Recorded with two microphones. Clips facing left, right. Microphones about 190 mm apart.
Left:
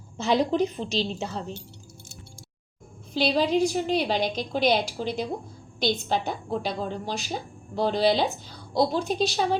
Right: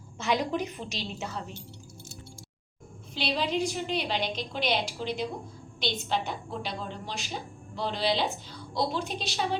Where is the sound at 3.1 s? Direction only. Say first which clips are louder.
Left 7 dB; 40° left (ahead or behind).